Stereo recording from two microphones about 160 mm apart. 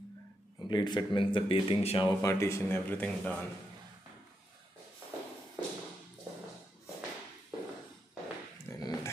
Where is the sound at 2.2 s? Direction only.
15° left (ahead or behind).